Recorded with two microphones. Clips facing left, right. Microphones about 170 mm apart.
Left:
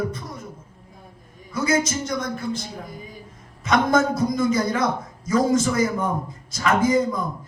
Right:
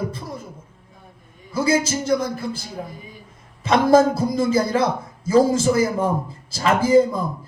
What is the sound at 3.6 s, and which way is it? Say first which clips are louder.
A man's voice: right 5 dB; 30° right (ahead or behind).